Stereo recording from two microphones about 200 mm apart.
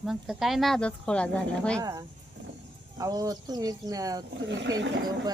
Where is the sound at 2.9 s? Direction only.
15° right (ahead or behind).